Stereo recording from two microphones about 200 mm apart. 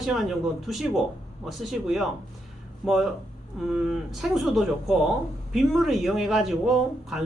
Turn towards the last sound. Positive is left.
turn(degrees=0)  # may be behind; listen again after turning